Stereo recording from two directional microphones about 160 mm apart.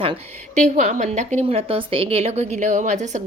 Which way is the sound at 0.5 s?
50° right (ahead or behind).